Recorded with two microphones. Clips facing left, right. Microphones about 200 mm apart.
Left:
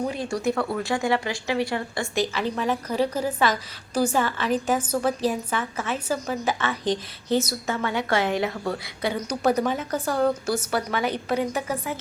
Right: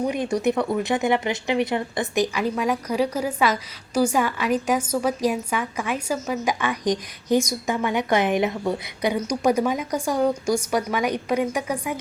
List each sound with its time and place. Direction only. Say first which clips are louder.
0.1 s a woman's voice: right 4 dB; 20° right (ahead or behind)